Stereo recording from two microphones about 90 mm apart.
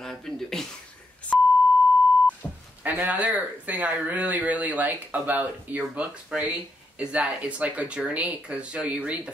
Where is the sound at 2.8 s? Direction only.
15° right (ahead or behind).